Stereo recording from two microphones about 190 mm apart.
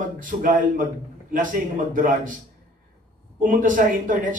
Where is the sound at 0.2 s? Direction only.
45° right (ahead or behind).